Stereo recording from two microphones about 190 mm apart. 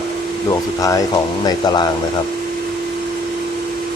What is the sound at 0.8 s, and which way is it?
Speech, 20° left (ahead or behind).